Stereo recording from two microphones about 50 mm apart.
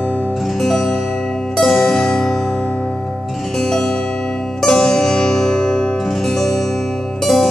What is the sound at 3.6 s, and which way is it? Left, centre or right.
Music, centre.